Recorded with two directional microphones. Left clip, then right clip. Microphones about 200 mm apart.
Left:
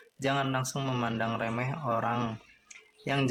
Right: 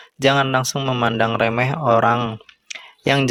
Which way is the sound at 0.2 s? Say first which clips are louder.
Right 13 dB; 40° right (ahead or behind).